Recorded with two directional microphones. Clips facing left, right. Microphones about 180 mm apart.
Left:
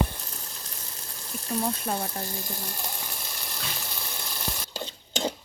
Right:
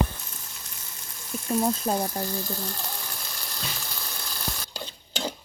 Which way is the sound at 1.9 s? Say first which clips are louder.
Right 4 dB; 20° right (ahead or behind).